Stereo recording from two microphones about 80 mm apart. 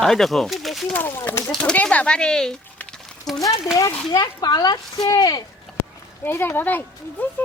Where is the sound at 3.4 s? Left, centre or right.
Left.